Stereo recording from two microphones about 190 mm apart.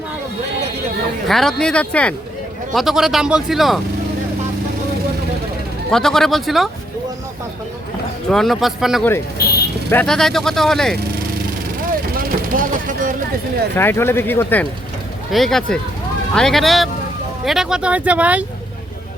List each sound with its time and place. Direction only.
1.3 s a man's voice: centre (ahead or behind)
5.9 s a man's voice: 5° left (ahead or behind)
8.3 s a man's voice: centre (ahead or behind)
9.4 s vehicle: 55° left (ahead or behind)
9.9 s a man's voice: 5° left (ahead or behind)
12.1 s vehicle: 45° right (ahead or behind)
13.7 s a man's voice: 10° left (ahead or behind); by 18.4 s 5° right (ahead or behind)